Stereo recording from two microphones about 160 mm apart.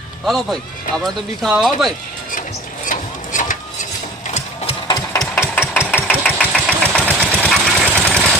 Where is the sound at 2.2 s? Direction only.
55° left (ahead or behind).